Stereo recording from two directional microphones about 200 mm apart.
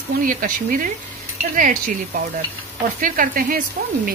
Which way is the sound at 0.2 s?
45° right (ahead or behind).